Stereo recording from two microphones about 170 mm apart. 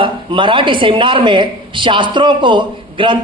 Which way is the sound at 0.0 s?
30° right (ahead or behind).